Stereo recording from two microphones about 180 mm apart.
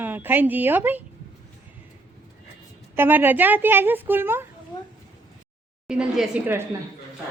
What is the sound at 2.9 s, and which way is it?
Speech, 10° right (ahead or behind).